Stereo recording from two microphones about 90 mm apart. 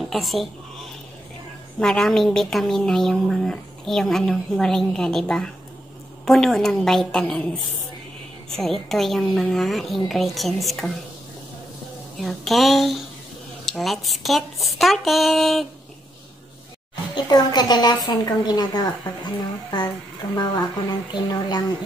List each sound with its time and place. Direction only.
0.0 s speech: centre (ahead or behind)
1.8 s a woman's voice: 5° left (ahead or behind)
12.2 s a woman's voice: centre (ahead or behind)
17.1 s a woman's voice: 50° left (ahead or behind)